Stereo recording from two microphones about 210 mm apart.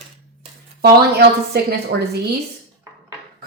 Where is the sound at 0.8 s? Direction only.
50° right (ahead or behind).